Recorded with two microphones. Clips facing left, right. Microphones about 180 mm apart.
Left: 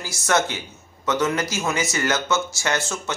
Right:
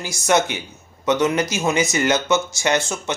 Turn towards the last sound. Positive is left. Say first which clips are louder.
# right 4 dB
turn(degrees=-15)  # may be behind; listen again after turning